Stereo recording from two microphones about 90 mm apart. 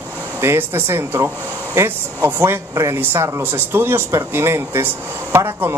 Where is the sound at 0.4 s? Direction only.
25° right (ahead or behind).